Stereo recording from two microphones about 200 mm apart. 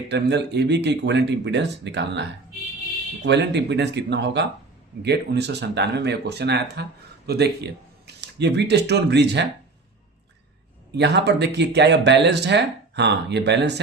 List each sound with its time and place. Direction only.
0.1 s speech: 60° right (ahead or behind)
3.2 s speech: 60° right (ahead or behind)
10.9 s speech: 60° right (ahead or behind)